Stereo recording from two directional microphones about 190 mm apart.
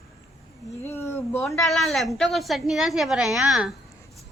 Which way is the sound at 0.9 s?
15° left (ahead or behind).